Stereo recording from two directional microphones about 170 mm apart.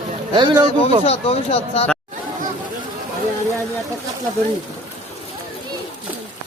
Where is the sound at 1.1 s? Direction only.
35° left (ahead or behind).